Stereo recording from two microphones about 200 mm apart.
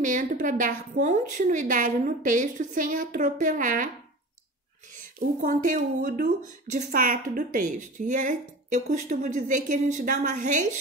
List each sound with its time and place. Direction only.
0.0 s speech: 40° right (ahead or behind)
4.9 s speech: 40° right (ahead or behind)